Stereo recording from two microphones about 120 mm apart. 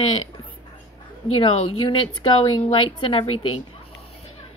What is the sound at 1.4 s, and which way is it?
A woman's voice, 45° left (ahead or behind).